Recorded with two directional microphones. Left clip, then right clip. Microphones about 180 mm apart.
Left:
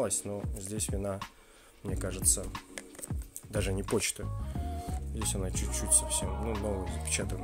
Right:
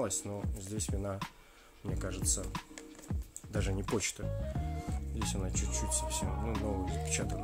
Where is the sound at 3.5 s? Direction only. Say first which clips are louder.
Left 4 dB; 40° left (ahead or behind).